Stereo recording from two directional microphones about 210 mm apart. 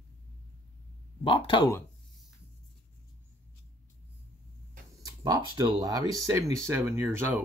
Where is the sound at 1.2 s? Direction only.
25° left (ahead or behind).